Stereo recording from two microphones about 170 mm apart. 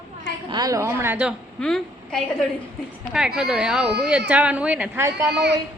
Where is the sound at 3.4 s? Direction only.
5° right (ahead or behind).